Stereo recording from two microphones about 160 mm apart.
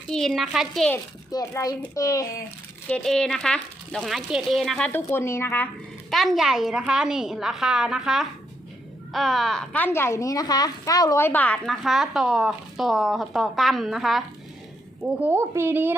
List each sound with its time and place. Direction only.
0.1 s a woman's voice: centre (ahead or behind)
1.3 s a child's voice: 20° left (ahead or behind)
2.9 s a woman's voice: 5° left (ahead or behind)
4.9 s speech: 15° left (ahead or behind)
6.1 s a woman's voice: centre (ahead or behind)
15.2 s a woman's voice: 15° right (ahead or behind)